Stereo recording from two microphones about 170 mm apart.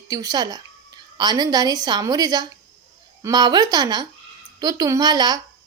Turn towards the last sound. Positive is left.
turn(degrees=-25)  # may be behind; listen again after turning